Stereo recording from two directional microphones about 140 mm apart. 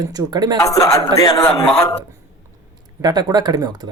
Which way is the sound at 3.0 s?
30° right (ahead or behind).